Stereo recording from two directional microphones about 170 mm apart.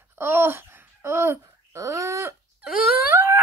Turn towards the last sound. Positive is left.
turn(degrees=-15)  # may be behind; listen again after turning